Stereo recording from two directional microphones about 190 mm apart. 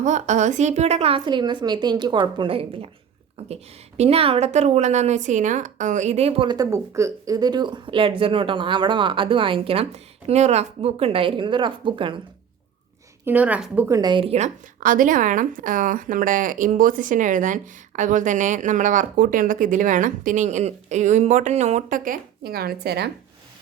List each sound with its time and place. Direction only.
0.0 s a woman's voice: 40° right (ahead or behind)
13.2 s a woman's voice: 10° right (ahead or behind); by 23.1 s 55° right (ahead or behind)